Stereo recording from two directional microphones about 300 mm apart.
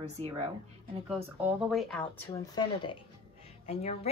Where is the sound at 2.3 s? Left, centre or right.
Centre.